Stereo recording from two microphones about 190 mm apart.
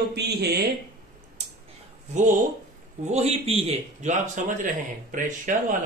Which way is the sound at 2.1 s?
40° right (ahead or behind).